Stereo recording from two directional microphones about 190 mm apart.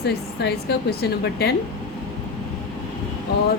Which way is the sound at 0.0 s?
60° left (ahead or behind).